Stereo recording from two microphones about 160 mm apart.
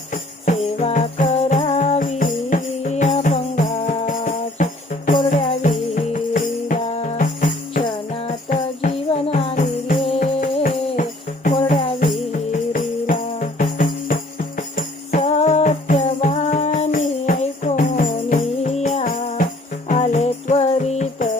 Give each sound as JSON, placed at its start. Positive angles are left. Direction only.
{"t": 0.1, "sound": "music", "side_deg": 50}
{"t": 6.8, "sound": "music", "side_deg": 40}
{"t": 9.6, "sound": "music", "side_deg": 60}
{"t": 12.3, "sound": "music", "side_deg": 55}
{"t": 15.2, "sound": "music", "side_deg": 40}